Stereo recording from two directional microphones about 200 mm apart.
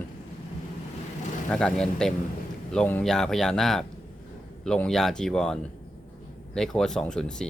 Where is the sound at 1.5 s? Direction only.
Centre (ahead or behind).